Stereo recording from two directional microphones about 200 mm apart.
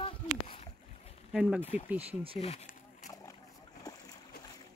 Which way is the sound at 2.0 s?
30° right (ahead or behind).